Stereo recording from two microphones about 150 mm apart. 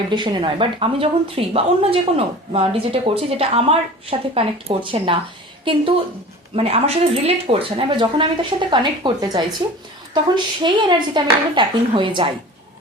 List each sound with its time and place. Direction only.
0.1 s a woman's voice: 30° right (ahead or behind)
6.6 s a woman's voice: 40° right (ahead or behind)